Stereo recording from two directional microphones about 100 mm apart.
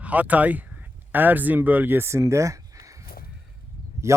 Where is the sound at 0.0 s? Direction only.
15° right (ahead or behind); by 2.6 s 30° right (ahead or behind).